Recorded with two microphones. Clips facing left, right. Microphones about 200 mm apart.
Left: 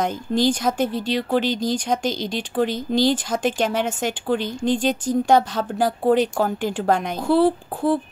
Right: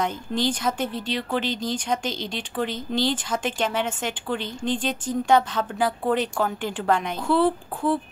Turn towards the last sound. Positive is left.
turn(degrees=35)  # may be behind; listen again after turning